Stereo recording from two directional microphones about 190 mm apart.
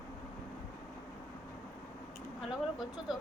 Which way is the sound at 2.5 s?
Centre (ahead or behind).